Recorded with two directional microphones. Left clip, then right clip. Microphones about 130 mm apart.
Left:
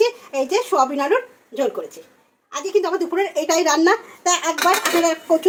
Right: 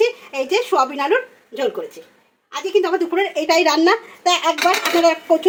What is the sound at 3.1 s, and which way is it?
A woman's voice, 15° right (ahead or behind).